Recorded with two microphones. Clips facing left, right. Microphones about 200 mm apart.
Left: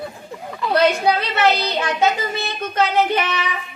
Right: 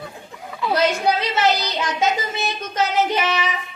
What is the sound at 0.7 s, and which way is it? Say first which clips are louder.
Speech: left 3 dB; 60° left (ahead or behind).